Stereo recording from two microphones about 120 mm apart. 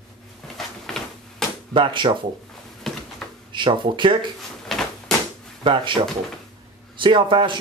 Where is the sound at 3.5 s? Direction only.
45° right (ahead or behind).